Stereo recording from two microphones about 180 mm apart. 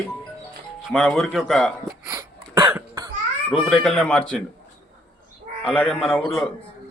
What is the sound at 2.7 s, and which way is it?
Cough, 15° right (ahead or behind).